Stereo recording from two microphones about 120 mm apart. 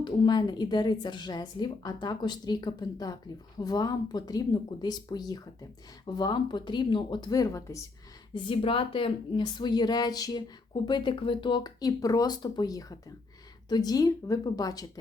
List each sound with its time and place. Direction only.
0.0 s a woman's voice: 35° left (ahead or behind)
8.3 s a woman's voice: 45° left (ahead or behind)